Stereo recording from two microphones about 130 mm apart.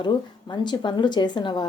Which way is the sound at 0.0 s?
35° left (ahead or behind).